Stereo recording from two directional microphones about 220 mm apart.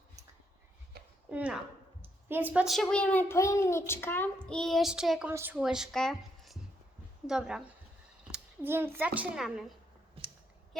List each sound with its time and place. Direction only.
1.3 s a woman's voice: 5° right (ahead or behind)
10.2 s clicking: 25° right (ahead or behind)